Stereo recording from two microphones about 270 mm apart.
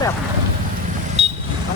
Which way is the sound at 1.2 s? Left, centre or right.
Right.